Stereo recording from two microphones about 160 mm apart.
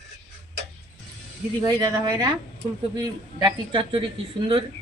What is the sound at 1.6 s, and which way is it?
Speech, 25° right (ahead or behind).